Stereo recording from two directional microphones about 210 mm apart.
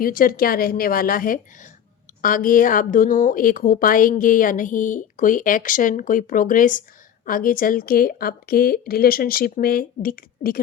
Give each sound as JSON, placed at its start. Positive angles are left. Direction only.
{"t": 0.0, "sound": "a woman's voice", "side_deg": 40}